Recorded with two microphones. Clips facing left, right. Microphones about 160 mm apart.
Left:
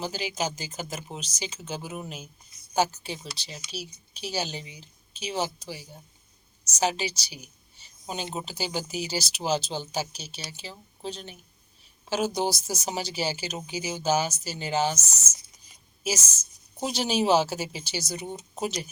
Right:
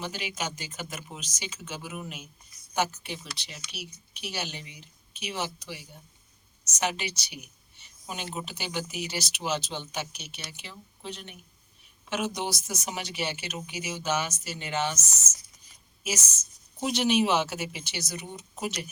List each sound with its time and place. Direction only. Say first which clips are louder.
0.0 s a woman's voice: left 4 dB; 35° left (ahead or behind)
16.8 s a woman's voice: right 1 dB; 35° left (ahead or behind)